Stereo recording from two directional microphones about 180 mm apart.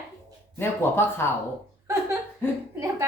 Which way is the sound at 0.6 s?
15° left (ahead or behind).